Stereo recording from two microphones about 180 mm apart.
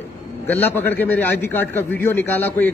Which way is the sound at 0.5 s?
10° left (ahead or behind).